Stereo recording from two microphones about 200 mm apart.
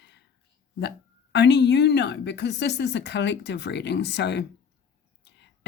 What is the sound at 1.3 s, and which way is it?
A woman's voice, 60° left (ahead or behind).